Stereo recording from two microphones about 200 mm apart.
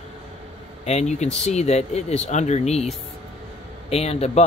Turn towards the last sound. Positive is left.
turn(degrees=30)  # may be behind; listen again after turning